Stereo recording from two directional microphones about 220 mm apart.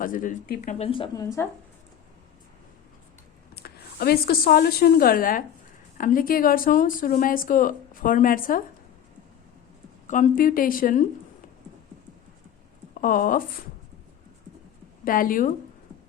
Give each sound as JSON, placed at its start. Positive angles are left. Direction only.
{"t": 0.0, "sound": "speech", "side_deg": 40}
{"t": 3.5, "sound": "a woman's voice", "side_deg": 45}
{"t": 10.1, "sound": "speech", "side_deg": 35}
{"t": 12.9, "sound": "speech", "side_deg": 40}
{"t": 15.0, "sound": "speech", "side_deg": 40}